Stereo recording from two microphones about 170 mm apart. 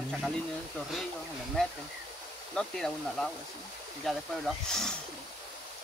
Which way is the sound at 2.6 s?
5° left (ahead or behind).